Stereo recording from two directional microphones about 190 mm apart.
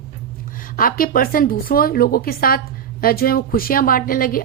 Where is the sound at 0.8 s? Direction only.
50° left (ahead or behind).